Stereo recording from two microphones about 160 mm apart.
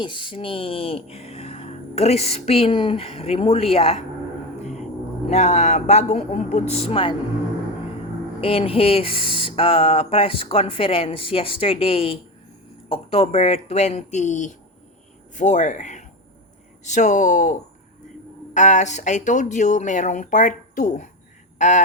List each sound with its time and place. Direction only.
0.0 s speech: 30° left (ahead or behind)
4.6 s music: 45° left (ahead or behind)
5.3 s speech: 45° left (ahead or behind)
8.4 s speech: 35° left (ahead or behind)